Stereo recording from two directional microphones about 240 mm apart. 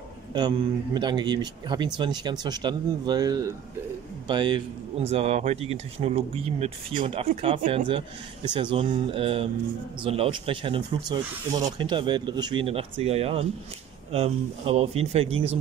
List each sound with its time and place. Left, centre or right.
0.3 s a man's voice: centre